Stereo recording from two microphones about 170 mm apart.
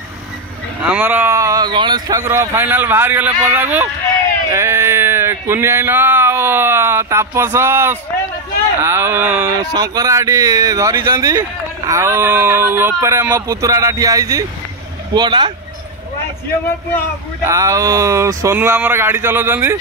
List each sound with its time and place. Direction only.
0.8 s speech: 10° right (ahead or behind); by 15.5 s 25° right (ahead or behind)
17.5 s speech: 20° right (ahead or behind)